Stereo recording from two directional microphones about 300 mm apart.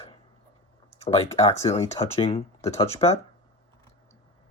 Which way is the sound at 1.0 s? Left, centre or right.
Left.